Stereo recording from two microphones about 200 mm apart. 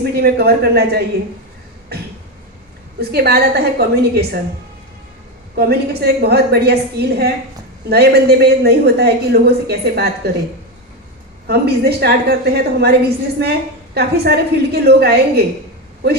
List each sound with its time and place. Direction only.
0.0 s a woman's voice: 50° right (ahead or behind)
3.0 s a woman's voice: 50° right (ahead or behind)
5.5 s a woman's voice: 50° right (ahead or behind)
11.4 s a woman's voice: 55° right (ahead or behind)